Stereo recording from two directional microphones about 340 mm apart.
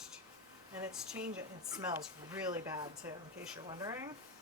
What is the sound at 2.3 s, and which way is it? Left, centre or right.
Speech, centre.